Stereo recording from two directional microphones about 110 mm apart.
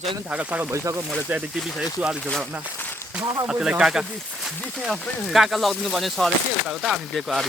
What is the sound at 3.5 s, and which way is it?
Speech, 5° right (ahead or behind).